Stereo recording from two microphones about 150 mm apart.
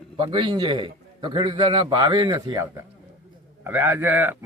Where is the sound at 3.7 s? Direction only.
15° right (ahead or behind).